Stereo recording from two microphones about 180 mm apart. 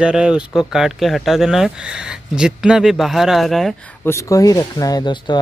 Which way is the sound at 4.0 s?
15° left (ahead or behind).